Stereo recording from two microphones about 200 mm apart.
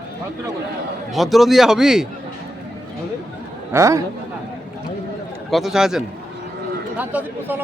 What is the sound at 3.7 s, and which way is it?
Speech, 15° right (ahead or behind).